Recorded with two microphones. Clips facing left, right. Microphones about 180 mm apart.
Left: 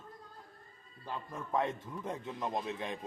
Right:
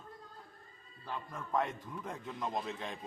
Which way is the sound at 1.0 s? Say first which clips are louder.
Left 1 dB; 15° left (ahead or behind).